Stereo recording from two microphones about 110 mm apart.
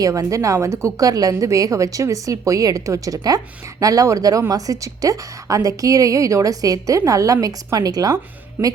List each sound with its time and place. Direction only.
0.0 s a woman's voice: 30° right (ahead or behind)